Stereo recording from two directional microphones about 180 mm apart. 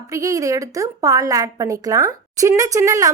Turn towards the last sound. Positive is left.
turn(degrees=-15)  # may be behind; listen again after turning